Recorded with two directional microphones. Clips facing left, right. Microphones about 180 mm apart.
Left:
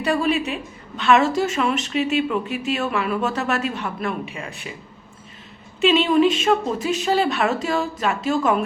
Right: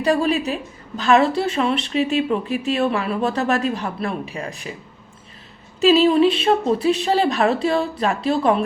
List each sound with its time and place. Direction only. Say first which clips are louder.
0.0 s a woman's voice: right 2 dB; 35° right (ahead or behind)
5.8 s a woman's voice: right 2 dB; 35° right (ahead or behind)